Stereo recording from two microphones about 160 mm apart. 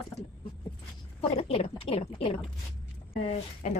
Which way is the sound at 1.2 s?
35° left (ahead or behind).